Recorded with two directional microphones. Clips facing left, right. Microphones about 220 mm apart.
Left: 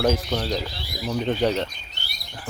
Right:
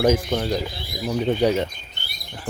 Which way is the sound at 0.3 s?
10° right (ahead or behind).